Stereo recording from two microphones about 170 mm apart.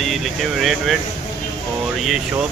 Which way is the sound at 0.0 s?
Centre (ahead or behind).